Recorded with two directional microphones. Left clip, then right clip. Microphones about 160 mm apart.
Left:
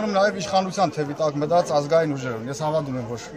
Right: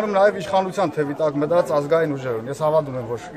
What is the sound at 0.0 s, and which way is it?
A man's voice, 10° right (ahead or behind).